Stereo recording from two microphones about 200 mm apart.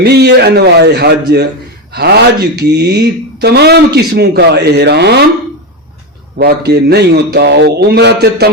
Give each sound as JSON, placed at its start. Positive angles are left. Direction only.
{"t": 0.0, "sound": "speech", "side_deg": -55}
{"t": 6.3, "sound": "speech", "side_deg": -50}